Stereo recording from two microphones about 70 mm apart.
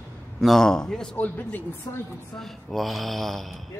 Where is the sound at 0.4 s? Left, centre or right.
Centre.